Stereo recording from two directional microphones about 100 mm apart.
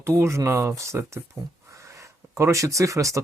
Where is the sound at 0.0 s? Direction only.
30° right (ahead or behind).